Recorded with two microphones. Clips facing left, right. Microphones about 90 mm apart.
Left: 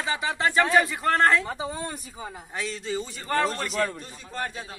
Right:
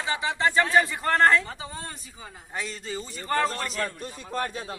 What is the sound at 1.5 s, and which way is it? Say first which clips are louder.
Speech: left 6 dB; 20° left (ahead or behind).